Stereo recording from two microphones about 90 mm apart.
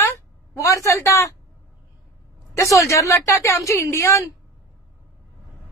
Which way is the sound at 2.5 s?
35° left (ahead or behind).